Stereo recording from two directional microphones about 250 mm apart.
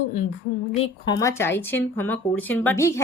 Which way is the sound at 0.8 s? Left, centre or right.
Centre.